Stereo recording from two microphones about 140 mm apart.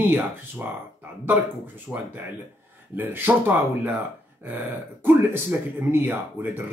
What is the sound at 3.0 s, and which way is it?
Speech, 15° right (ahead or behind).